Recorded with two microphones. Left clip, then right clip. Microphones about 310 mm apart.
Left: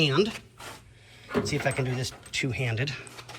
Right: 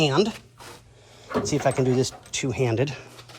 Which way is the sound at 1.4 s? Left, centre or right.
Centre.